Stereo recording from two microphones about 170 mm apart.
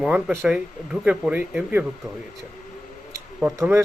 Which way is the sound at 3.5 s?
20° right (ahead or behind).